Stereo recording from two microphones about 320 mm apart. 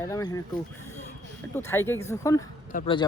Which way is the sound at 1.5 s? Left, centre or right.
Centre.